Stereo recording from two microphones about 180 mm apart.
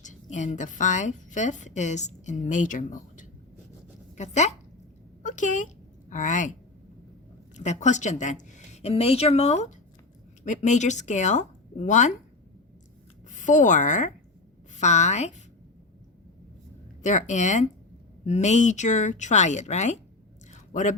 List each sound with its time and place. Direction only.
0.0 s a woman's voice: 45° left (ahead or behind)
7.5 s a woman's voice: 40° left (ahead or behind)
13.2 s a woman's voice: 45° left (ahead or behind)
17.0 s a woman's voice: 45° left (ahead or behind)
20.5 s a sound: 45° left (ahead or behind)